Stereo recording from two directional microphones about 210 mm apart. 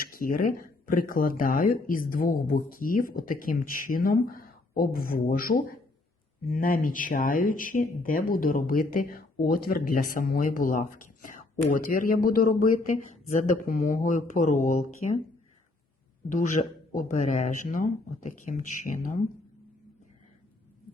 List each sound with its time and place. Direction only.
0.0 s speech: 45° left (ahead or behind)
16.3 s speech: 40° left (ahead or behind)